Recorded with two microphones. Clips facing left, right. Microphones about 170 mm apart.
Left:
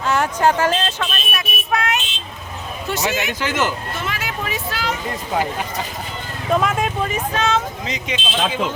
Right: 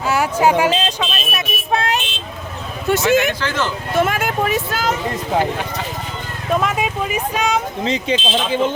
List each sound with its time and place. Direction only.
0.1 s speech: 10° right (ahead or behind)
1.7 s vehicle: 30° right (ahead or behind)
2.9 s speech: 50° right (ahead or behind)
3.4 s speech: 20° left (ahead or behind)
3.9 s speech: 50° right (ahead or behind)
6.5 s speech: centre (ahead or behind)
7.9 s speech: 30° right (ahead or behind)